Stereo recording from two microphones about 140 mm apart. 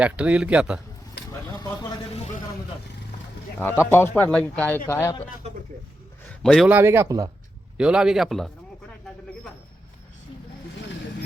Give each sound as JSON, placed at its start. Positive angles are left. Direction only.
{"t": 0.0, "sound": "a man's voice", "side_deg": -10}
{"t": 1.3, "sound": "a sound", "side_deg": 25}
{"t": 2.1, "sound": "vehicle", "side_deg": 50}
{"t": 3.6, "sound": "speech", "side_deg": 15}
{"t": 6.2, "sound": "a sound", "side_deg": 5}
{"t": 6.7, "sound": "a man's voice", "side_deg": -15}
{"t": 7.8, "sound": "speech", "side_deg": -5}